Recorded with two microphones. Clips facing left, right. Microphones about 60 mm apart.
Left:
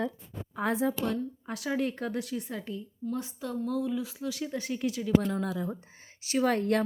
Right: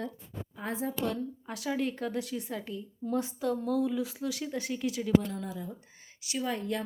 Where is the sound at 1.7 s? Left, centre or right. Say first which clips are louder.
Left 1 dB; left.